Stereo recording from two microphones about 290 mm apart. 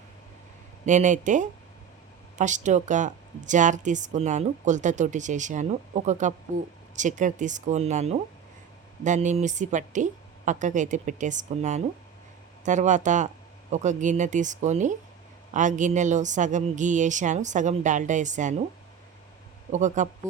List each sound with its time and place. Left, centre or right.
0.9 s speech: right
19.7 s speech: right